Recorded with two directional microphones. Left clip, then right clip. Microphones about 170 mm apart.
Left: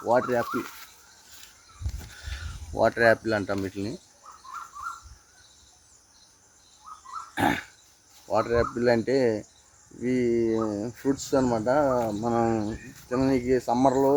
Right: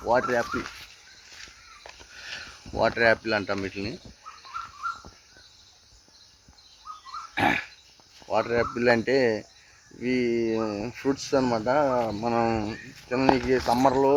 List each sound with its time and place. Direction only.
0.0 s speech: centre (ahead or behind)
2.7 s speech: 5° right (ahead or behind)
7.3 s a sound: 5° right (ahead or behind)
8.3 s speech: 5° right (ahead or behind)
8.7 s speech: 15° right (ahead or behind)